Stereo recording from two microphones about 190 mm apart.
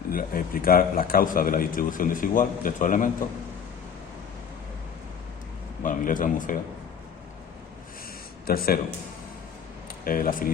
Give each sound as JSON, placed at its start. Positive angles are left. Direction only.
{"t": 0.1, "sound": "a man's voice", "side_deg": 50}
{"t": 5.8, "sound": "a man's voice", "side_deg": 45}
{"t": 8.4, "sound": "a man's voice", "side_deg": 50}
{"t": 10.0, "sound": "a man's voice", "side_deg": 50}